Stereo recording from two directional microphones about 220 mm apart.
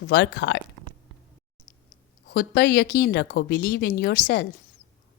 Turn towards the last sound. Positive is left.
turn(degrees=45)  # may be behind; listen again after turning